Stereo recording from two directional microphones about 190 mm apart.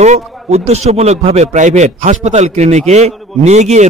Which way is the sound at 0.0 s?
35° right (ahead or behind).